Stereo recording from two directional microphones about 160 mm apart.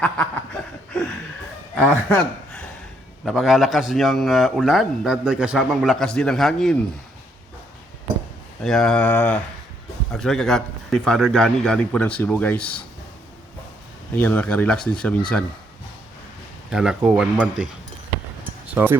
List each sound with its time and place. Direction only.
0.0 s snicker: 10° left (ahead or behind)
2.0 s a man's voice: 5° left (ahead or behind)
8.6 s a man's voice: 5° left (ahead or behind)
14.2 s speech: 10° left (ahead or behind)
16.6 s a man's voice: 5° right (ahead or behind)
18.7 s speech: 15° right (ahead or behind)